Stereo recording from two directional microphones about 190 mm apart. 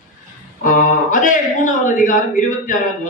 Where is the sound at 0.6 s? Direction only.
45° left (ahead or behind).